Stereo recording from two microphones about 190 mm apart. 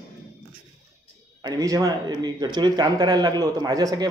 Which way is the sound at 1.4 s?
20° right (ahead or behind).